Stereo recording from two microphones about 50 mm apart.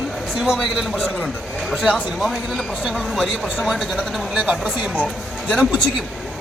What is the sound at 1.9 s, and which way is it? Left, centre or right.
A man's voice, centre.